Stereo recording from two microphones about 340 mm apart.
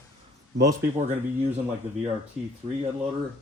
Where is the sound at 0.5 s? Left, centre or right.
Right.